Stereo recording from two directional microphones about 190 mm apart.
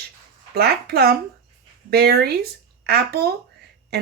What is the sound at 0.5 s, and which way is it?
Speech, 55° right (ahead or behind).